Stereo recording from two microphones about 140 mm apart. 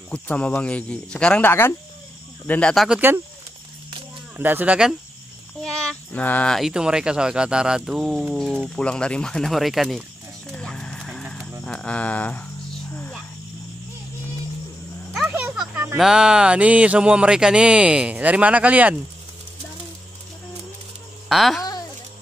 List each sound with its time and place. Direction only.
0.1 s speech: 10° left (ahead or behind)
1.5 s speech: 15° left (ahead or behind)
2.7 s speech: centre (ahead or behind)
4.4 s speech: 15° right (ahead or behind)
5.6 s speech: 5° left (ahead or behind)
10.5 s frog: 5° left (ahead or behind)
11.6 s a sound: 5° left (ahead or behind)
15.1 s a sound: 5° right (ahead or behind)
16.0 s speech: 5° right (ahead or behind)
21.3 s speech: centre (ahead or behind)